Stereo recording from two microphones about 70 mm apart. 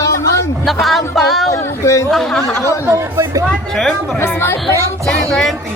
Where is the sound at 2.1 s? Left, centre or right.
Centre.